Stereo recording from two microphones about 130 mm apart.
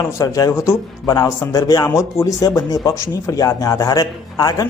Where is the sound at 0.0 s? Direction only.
25° left (ahead or behind).